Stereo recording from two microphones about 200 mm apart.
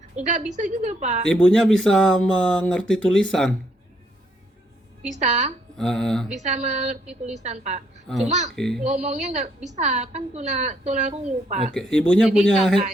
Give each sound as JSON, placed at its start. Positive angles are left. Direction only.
{"t": 0.2, "sound": "a woman's voice", "side_deg": -40}
{"t": 1.3, "sound": "speech", "side_deg": 5}
{"t": 5.0, "sound": "a woman's voice", "side_deg": -35}
{"t": 5.7, "sound": "speech", "side_deg": 5}
{"t": 6.3, "sound": "a woman's voice", "side_deg": -35}
{"t": 7.0, "sound": "speech", "side_deg": -5}
{"t": 7.3, "sound": "a woman's voice", "side_deg": -35}
{"t": 8.0, "sound": "speech", "side_deg": 0}
{"t": 8.8, "sound": "a woman's voice", "side_deg": -35}
{"t": 11.7, "sound": "speech", "side_deg": 5}